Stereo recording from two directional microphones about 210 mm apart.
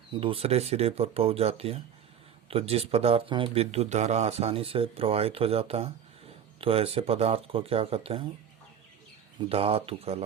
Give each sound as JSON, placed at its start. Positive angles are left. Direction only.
{"t": 0.1, "sound": "speech", "side_deg": -25}
{"t": 9.4, "sound": "speech", "side_deg": -25}